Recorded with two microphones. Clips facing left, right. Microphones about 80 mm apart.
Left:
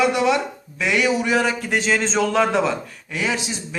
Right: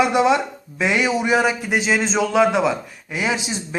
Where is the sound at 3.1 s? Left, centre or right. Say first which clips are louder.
Right 1 dB; centre.